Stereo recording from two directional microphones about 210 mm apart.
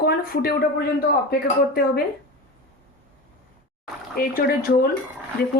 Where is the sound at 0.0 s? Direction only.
45° left (ahead or behind).